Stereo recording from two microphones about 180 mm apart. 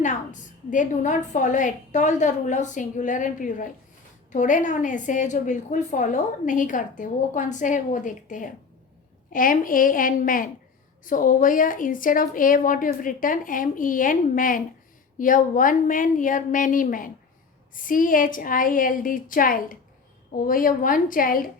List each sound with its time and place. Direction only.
0.0 s a woman's voice: 45° left (ahead or behind)